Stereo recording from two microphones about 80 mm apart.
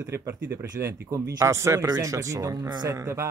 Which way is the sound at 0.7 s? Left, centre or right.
Right.